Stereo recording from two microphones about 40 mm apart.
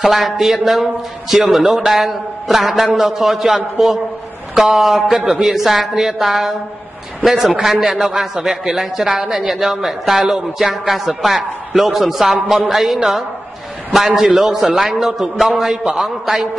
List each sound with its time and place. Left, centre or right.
0.1 s speech: centre
4.7 s speech: centre
7.5 s speech: centre